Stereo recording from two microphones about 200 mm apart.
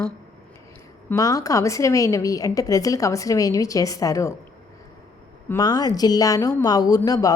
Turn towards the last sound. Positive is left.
turn(degrees=20)  # may be behind; listen again after turning